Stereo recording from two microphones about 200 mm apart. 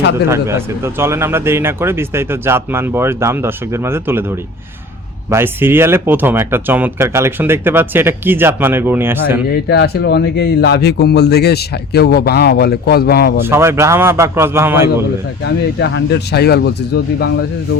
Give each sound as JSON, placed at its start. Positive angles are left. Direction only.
{"t": 0.3, "sound": "speech", "side_deg": -15}
{"t": 9.5, "sound": "speech", "side_deg": 55}
{"t": 13.4, "sound": "speech", "side_deg": -10}
{"t": 15.8, "sound": "speech", "side_deg": 60}